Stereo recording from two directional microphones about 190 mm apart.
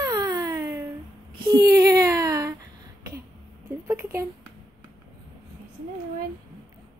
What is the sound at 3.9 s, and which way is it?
Speech, 10° right (ahead or behind).